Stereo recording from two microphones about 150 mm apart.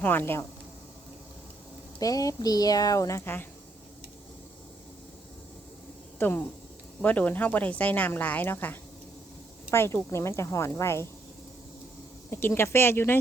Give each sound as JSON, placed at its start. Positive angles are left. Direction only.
{"t": 0.0, "sound": "speech", "side_deg": 15}
{"t": 2.0, "sound": "speech", "side_deg": 25}
{"t": 6.1, "sound": "speech", "side_deg": 10}
{"t": 12.3, "sound": "speech", "side_deg": 15}